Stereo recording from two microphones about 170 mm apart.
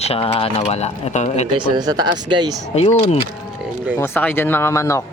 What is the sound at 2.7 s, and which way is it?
Speech, 40° left (ahead or behind).